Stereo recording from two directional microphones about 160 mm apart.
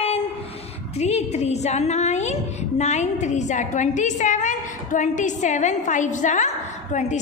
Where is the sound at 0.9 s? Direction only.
45° left (ahead or behind).